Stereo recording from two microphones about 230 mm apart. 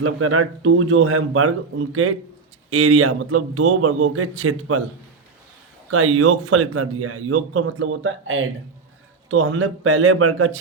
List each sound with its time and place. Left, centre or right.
0.0 s speech: right
5.9 s a man's voice: right